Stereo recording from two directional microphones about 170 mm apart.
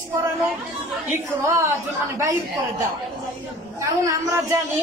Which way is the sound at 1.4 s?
15° right (ahead or behind).